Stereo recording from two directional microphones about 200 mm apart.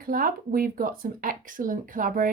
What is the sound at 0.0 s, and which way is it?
Speech, 45° right (ahead or behind).